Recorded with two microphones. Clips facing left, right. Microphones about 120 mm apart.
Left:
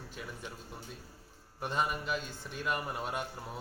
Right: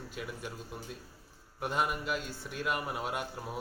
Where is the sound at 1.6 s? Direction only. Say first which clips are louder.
Right 1 dB; 10° right (ahead or behind).